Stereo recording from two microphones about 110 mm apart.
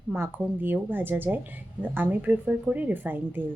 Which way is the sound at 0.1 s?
20° right (ahead or behind).